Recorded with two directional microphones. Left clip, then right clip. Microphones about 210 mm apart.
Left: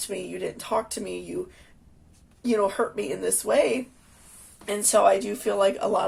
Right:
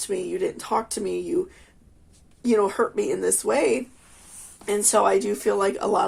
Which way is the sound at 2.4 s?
40° right (ahead or behind).